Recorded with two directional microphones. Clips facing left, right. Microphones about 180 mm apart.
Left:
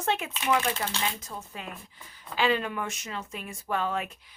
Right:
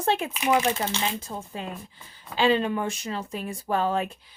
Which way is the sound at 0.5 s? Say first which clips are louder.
Right 4 dB; 20° right (ahead or behind).